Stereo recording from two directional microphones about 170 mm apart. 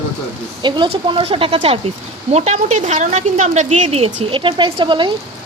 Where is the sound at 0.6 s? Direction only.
30° right (ahead or behind).